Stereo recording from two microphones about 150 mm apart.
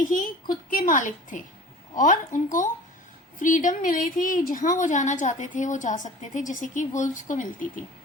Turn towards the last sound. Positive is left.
turn(degrees=60)  # may be behind; listen again after turning